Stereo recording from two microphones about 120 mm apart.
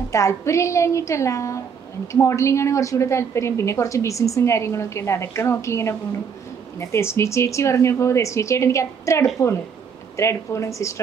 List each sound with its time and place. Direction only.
0.1 s a woman's voice: 25° left (ahead or behind)